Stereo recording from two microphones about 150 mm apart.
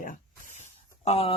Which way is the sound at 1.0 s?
40° left (ahead or behind).